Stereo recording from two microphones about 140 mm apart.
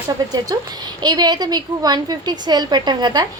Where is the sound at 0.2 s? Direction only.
25° right (ahead or behind).